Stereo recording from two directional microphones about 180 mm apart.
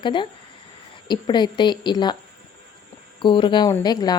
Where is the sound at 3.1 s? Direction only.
25° left (ahead or behind).